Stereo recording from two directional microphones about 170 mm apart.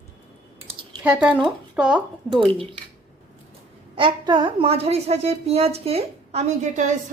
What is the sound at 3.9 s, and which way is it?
A woman's voice, 30° right (ahead or behind).